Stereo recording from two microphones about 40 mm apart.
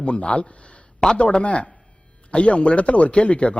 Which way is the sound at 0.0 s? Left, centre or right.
Left.